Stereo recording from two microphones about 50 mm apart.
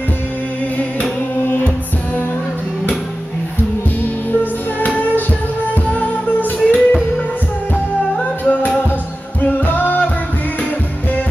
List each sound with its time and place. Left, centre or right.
4.0 s music: left
4.8 s music: left